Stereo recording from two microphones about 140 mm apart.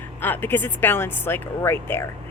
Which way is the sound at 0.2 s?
15° left (ahead or behind).